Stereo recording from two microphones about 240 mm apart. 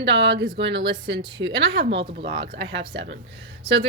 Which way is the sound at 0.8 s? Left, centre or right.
Centre.